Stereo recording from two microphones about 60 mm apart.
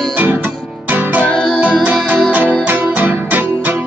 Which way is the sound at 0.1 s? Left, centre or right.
Right.